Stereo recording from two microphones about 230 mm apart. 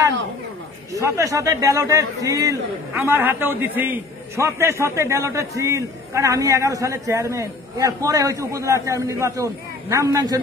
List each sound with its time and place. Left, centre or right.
0.9 s a man's voice: centre